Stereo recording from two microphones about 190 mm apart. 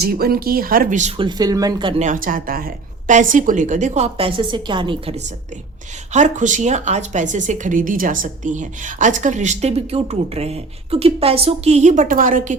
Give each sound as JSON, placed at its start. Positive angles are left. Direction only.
{"t": 0.0, "sound": "speech", "side_deg": -55}
{"t": 2.0, "sound": "speech", "side_deg": -45}
{"t": 6.1, "sound": "speech", "side_deg": -40}